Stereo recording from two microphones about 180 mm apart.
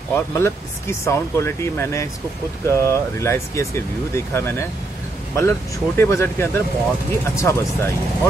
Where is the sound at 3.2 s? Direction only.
15° left (ahead or behind).